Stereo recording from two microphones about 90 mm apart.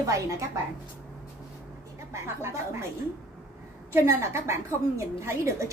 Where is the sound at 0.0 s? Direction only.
35° right (ahead or behind).